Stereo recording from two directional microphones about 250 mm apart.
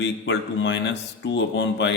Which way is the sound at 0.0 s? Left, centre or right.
Left.